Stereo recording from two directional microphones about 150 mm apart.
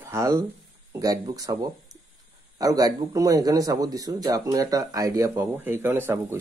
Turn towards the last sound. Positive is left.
turn(degrees=-15)  # may be behind; listen again after turning